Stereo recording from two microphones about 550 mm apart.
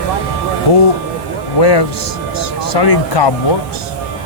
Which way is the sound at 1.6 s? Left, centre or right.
Left.